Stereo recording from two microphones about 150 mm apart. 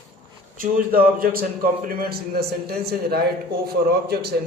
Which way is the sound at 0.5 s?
75° right (ahead or behind).